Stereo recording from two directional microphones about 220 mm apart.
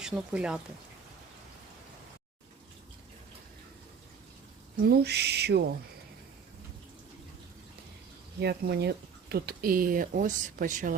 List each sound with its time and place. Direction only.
0.0 s speech: 5° right (ahead or behind)
4.9 s owl: 50° right (ahead or behind)
8.4 s speech: 45° right (ahead or behind)